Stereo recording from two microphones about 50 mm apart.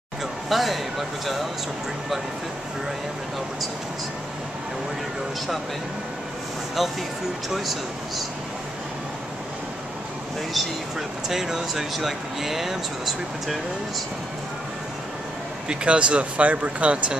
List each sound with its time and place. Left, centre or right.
0.5 s speech: centre
7.4 s speech: centre
10.5 s speech: centre
15.7 s speech: right